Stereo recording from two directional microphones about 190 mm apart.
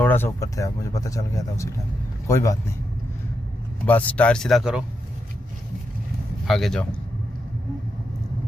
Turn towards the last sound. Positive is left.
turn(degrees=0)  # may be behind; listen again after turning